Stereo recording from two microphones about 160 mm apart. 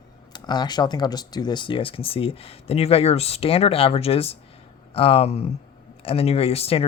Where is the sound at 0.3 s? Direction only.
25° left (ahead or behind).